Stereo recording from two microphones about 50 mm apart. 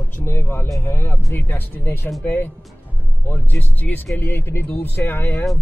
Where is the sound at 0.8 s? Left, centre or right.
Left.